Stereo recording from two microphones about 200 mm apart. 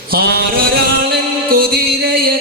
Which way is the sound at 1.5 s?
50° right (ahead or behind).